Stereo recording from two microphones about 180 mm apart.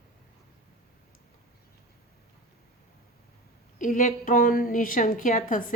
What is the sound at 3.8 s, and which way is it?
A woman's voice, 45° left (ahead or behind).